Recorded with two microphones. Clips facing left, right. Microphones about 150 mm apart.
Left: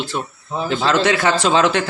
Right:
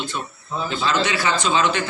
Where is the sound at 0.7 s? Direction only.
75° left (ahead or behind).